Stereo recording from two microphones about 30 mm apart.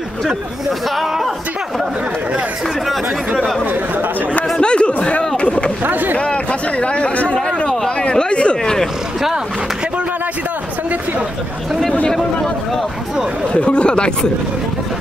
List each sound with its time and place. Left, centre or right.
0.7 s speech: centre
4.6 s a sound: left
5.9 s speech: right
6.1 s speech: left
7.4 s a sound: left
13.5 s speech: left